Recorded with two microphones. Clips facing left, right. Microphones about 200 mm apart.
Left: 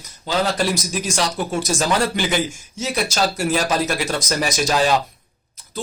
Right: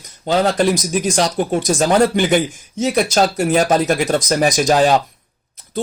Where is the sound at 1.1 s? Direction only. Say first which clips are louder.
Right 3 dB; 45° right (ahead or behind).